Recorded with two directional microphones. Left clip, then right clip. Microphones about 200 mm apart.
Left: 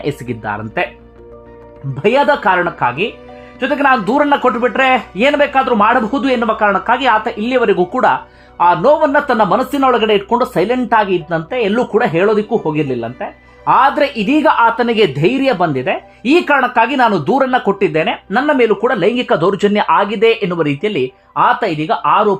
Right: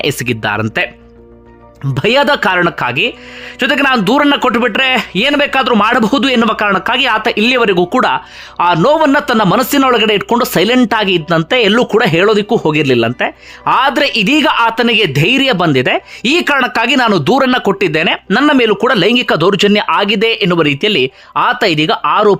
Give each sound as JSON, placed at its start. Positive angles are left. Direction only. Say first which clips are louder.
{"t": 0.0, "sound": "speech", "louder": "right 6 dB", "side_deg": -20}
{"t": 2.0, "sound": "speech", "louder": "right 1 dB", "side_deg": -30}